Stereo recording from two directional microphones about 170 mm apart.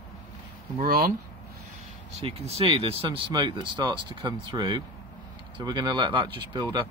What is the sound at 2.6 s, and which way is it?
Speech, 30° right (ahead or behind).